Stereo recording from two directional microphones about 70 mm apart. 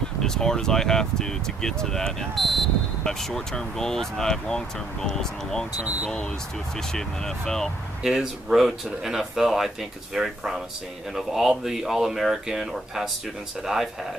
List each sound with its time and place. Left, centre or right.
0.2 s speech: centre
5.8 s speech: centre
6.9 s speech: centre
8.0 s speech: centre